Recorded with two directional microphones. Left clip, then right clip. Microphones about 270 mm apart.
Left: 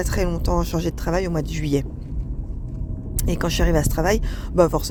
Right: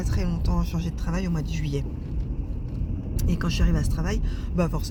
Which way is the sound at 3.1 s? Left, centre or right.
Left.